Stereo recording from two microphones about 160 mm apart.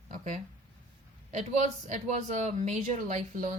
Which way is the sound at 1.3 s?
45° right (ahead or behind).